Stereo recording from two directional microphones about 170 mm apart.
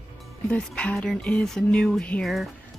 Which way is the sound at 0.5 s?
5° left (ahead or behind).